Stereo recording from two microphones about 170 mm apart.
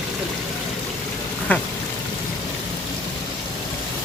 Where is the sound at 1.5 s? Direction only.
10° left (ahead or behind).